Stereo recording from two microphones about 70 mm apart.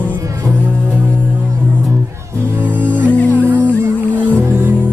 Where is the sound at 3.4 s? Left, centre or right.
Right.